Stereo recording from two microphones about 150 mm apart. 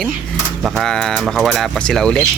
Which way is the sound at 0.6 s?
5° left (ahead or behind).